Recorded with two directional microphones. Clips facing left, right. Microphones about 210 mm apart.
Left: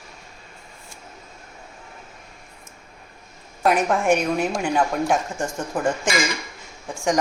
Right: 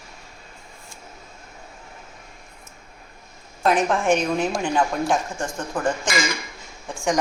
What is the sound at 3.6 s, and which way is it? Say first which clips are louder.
A woman's voice: left 1 dB; 5° left (ahead or behind).